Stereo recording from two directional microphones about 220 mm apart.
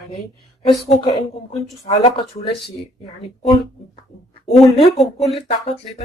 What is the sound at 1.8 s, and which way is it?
Speech, 25° left (ahead or behind).